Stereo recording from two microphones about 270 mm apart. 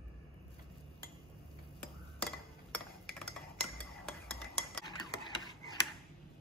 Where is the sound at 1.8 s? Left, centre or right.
Centre.